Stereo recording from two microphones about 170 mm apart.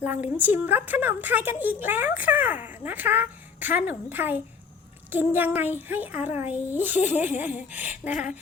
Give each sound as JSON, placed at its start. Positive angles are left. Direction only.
{"t": 0.0, "sound": "a woman's voice", "side_deg": -10}